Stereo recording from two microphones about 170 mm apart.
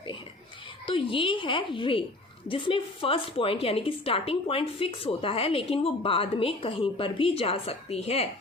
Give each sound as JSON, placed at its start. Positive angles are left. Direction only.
{"t": 0.9, "sound": "a woman's voice", "side_deg": 30}